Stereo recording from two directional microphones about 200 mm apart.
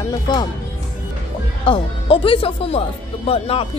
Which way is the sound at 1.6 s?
25° left (ahead or behind).